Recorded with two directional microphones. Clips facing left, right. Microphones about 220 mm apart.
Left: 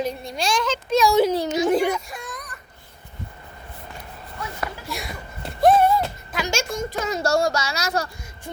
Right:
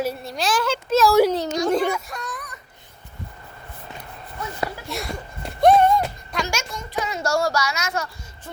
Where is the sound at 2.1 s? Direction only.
5° right (ahead or behind).